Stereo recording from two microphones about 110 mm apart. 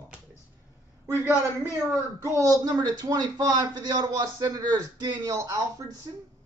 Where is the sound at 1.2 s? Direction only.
20° right (ahead or behind).